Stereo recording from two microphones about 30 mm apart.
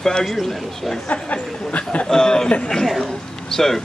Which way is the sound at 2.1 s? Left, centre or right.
Left.